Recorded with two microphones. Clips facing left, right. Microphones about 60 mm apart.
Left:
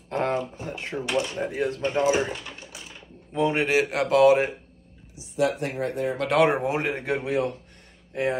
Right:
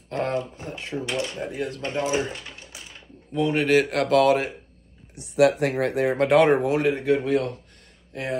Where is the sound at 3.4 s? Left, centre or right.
Left.